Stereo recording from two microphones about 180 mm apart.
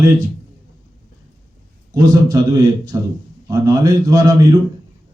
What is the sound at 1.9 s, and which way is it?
A man's voice, 20° right (ahead or behind).